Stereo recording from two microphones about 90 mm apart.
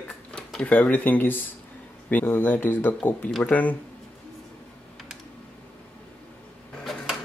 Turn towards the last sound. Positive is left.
turn(degrees=0)  # may be behind; listen again after turning